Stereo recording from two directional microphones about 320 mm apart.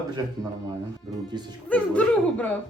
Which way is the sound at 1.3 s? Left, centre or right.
Centre.